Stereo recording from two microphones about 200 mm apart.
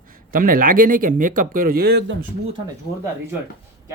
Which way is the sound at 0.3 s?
45° right (ahead or behind).